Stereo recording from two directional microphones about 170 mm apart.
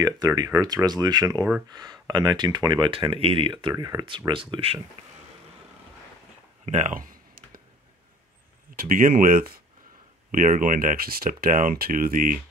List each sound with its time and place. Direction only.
0.0 s speech: 20° right (ahead or behind)
6.6 s a sound: 45° right (ahead or behind)
8.7 s speech: 55° right (ahead or behind)